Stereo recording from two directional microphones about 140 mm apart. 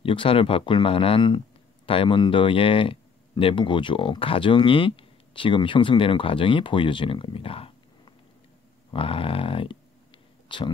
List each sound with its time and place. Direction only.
0.0 s speech: 40° left (ahead or behind)